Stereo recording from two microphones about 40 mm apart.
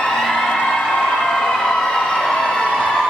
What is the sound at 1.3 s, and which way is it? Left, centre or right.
Emergency vehicle, centre.